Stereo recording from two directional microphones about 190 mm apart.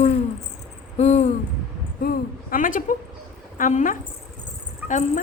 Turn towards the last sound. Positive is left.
turn(degrees=-10)  # may be behind; listen again after turning